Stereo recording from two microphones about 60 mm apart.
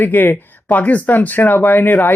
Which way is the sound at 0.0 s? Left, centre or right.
Left.